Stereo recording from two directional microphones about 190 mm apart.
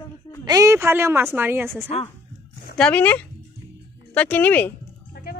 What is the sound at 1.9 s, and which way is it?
Speech, 35° left (ahead or behind).